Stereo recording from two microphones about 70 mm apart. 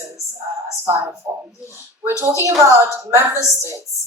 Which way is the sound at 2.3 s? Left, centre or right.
Right.